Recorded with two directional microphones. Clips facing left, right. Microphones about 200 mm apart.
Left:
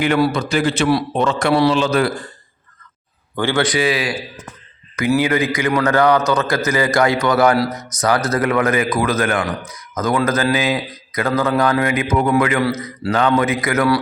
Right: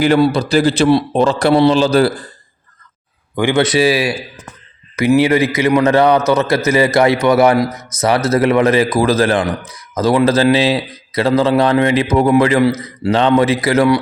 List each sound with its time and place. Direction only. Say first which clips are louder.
0.0 s a man's voice: right 4 dB; 35° right (ahead or behind)
3.3 s a man's voice: right 5 dB; 20° right (ahead or behind)
7.7 s speech: left 2 dB; centre (ahead or behind)
8.0 s a man's voice: right 4 dB; 25° right (ahead or behind)